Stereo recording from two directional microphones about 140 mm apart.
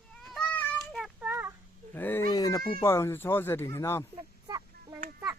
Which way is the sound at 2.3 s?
25° left (ahead or behind).